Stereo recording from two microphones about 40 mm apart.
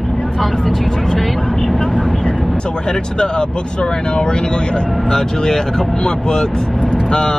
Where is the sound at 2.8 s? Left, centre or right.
Centre.